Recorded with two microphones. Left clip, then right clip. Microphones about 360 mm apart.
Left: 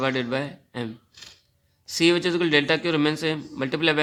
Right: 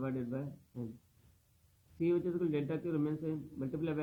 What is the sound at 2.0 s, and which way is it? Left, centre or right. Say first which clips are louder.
A man's voice: left 13 dB; left.